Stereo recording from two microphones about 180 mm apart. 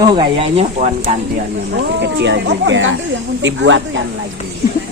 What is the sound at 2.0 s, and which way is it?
Speech, 80° right.